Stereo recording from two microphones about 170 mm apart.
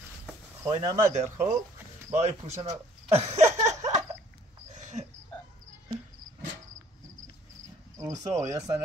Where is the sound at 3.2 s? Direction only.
40° right (ahead or behind).